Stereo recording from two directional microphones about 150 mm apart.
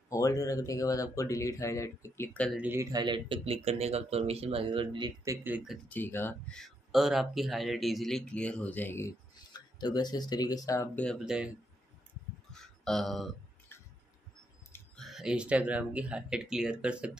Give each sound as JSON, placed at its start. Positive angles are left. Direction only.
{"t": 0.1, "sound": "speech", "side_deg": 20}
{"t": 2.5, "sound": "speech", "side_deg": -10}
{"t": 2.8, "sound": "speech", "side_deg": -25}
{"t": 5.5, "sound": "speech", "side_deg": -5}
{"t": 5.9, "sound": "speech", "side_deg": 15}
{"t": 6.6, "sound": "speech", "side_deg": 0}
{"t": 9.5, "sound": "speech", "side_deg": 30}
{"t": 11.2, "sound": "speech", "side_deg": -5}
{"t": 12.5, "sound": "a sound", "side_deg": 5}
{"t": 15.0, "sound": "speech", "side_deg": 0}